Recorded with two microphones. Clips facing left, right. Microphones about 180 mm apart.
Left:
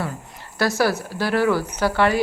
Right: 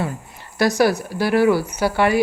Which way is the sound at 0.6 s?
15° right (ahead or behind).